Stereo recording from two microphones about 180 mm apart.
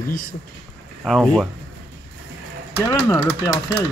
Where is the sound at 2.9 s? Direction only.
15° left (ahead or behind).